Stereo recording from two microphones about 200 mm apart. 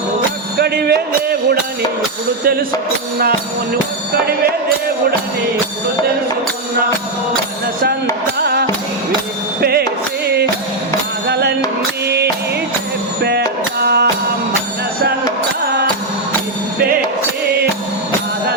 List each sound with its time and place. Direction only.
0.6 s music: 55° right (ahead or behind)
8.4 s music: 50° right (ahead or behind)
11.3 s music: 55° right (ahead or behind)
13.8 s music: 55° right (ahead or behind)